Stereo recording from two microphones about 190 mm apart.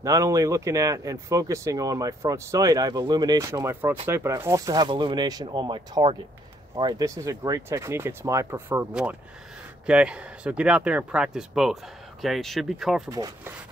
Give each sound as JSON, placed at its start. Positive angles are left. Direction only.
{"t": 0.0, "sound": "speech", "side_deg": -15}
{"t": 13.1, "sound": "speech", "side_deg": -20}